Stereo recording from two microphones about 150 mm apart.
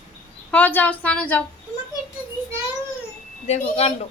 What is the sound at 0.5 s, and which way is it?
Speech, 10° left (ahead or behind).